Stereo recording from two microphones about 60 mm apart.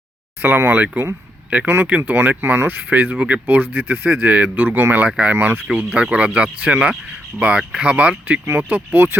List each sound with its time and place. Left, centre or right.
0.4 s speech: right
3.2 s speech: right
3.4 s speech: right